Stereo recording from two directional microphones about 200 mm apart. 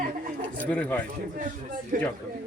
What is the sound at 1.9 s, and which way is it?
Speech, 45° right (ahead or behind).